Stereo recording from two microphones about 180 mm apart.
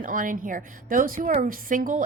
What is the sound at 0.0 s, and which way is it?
A woman's voice, 50° right (ahead or behind).